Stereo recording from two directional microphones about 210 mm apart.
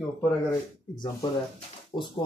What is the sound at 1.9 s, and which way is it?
Speech, 20° left (ahead or behind).